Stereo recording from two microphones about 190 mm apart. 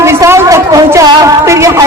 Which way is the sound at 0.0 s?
15° right (ahead or behind).